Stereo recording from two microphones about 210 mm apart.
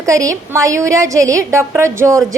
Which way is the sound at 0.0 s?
15° right (ahead or behind).